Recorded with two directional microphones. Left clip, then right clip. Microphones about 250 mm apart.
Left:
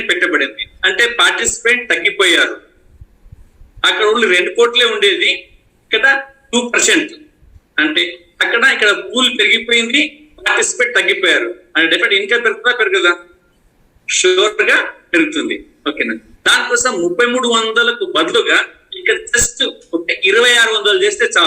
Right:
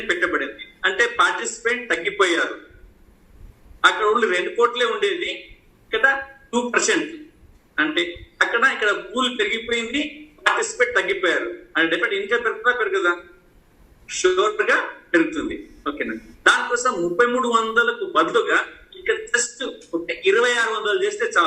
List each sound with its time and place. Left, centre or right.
0.1 s a man's voice: left
3.8 s a man's voice: left